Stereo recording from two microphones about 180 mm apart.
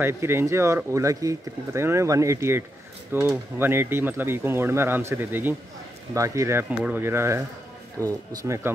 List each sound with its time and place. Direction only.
0.0 s speech: 15° right (ahead or behind)